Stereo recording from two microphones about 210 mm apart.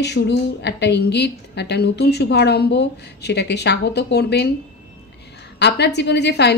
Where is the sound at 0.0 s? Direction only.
55° left (ahead or behind).